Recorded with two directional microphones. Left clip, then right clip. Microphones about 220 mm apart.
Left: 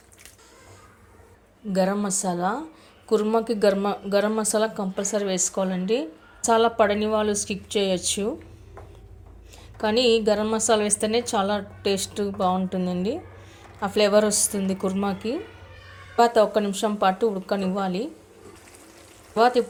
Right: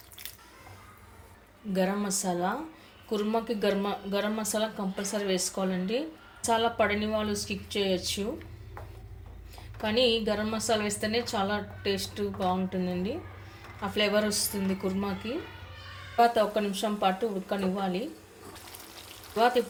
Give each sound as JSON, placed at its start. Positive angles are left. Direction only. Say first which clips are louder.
{"t": 1.7, "sound": "a woman's voice", "louder": "left 6 dB", "side_deg": 35}
{"t": 9.8, "sound": "a woman's voice", "louder": "left 6 dB", "side_deg": 40}
{"t": 19.4, "sound": "a woman's voice", "louder": "left 5 dB", "side_deg": 40}